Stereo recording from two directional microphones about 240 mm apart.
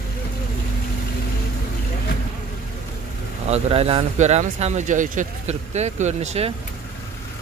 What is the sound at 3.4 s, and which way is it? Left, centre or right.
Speech, right.